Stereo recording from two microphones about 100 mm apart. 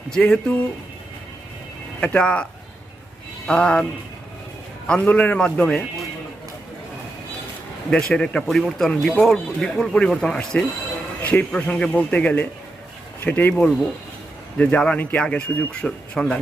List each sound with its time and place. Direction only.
0.1 s speech: 10° left (ahead or behind)
2.0 s speech: 10° left (ahead or behind)
4.9 s speech: 10° left (ahead or behind)
7.9 s speech: 10° left (ahead or behind)
11.2 s jingle bell: 15° left (ahead or behind)
11.5 s speech: 10° left (ahead or behind)